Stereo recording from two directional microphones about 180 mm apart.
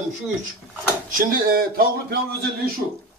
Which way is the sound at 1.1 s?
55° right (ahead or behind).